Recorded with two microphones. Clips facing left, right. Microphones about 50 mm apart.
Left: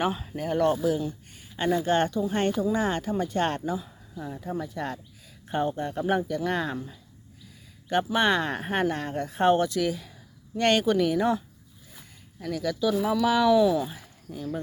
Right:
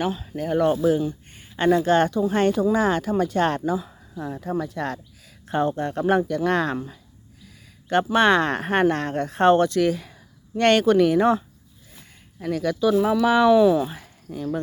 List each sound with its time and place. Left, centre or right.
0.0 s speech: centre
0.3 s speech: centre
0.8 s speech: right
1.5 s speech: right
13.8 s speech: right